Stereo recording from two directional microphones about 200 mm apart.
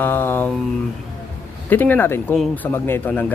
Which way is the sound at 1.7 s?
10° left (ahead or behind).